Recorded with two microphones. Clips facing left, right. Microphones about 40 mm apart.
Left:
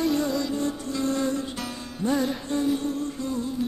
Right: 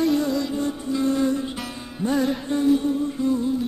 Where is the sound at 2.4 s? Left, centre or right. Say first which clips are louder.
Right 5 dB; centre.